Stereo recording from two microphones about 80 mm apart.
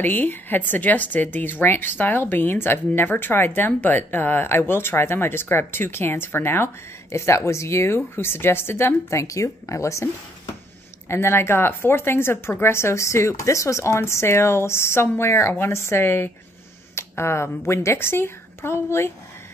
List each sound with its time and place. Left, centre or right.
0.0 s a woman's voice: left